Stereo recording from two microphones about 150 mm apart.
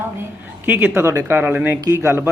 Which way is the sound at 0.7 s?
15° right (ahead or behind).